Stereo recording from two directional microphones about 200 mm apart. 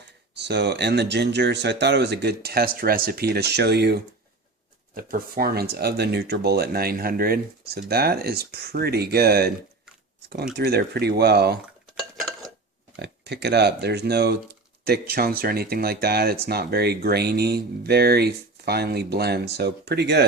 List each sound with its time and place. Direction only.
0.3 s speech: 60° right (ahead or behind)
4.9 s speech: 45° right (ahead or behind)
13.0 s speech: 55° right (ahead or behind)